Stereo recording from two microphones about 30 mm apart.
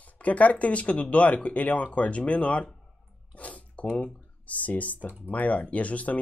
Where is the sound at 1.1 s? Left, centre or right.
Left.